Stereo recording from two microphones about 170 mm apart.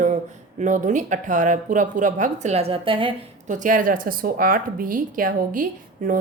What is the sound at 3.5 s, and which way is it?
A woman's voice, 50° right (ahead or behind).